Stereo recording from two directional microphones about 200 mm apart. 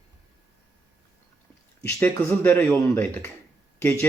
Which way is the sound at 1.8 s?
15° left (ahead or behind).